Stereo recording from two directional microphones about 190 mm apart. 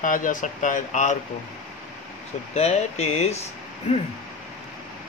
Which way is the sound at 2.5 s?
35° left (ahead or behind).